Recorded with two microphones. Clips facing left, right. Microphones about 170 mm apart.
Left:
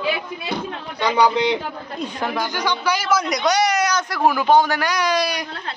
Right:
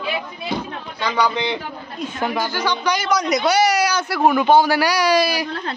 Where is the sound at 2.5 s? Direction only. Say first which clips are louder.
Right 1 dB; 15° left (ahead or behind).